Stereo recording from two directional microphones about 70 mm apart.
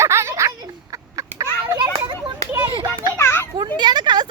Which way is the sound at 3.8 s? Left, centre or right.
Right.